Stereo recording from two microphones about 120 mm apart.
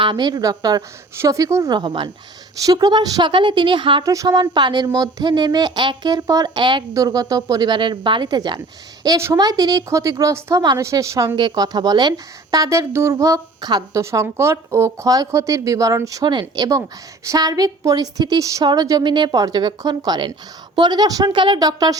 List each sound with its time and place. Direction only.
0.0 s a woman's voice: 40° right (ahead or behind)
1.7 s a woman's voice: 40° right (ahead or behind)
4.0 s a woman's voice: 30° right (ahead or behind)
14.0 s a woman's voice: 25° right (ahead or behind)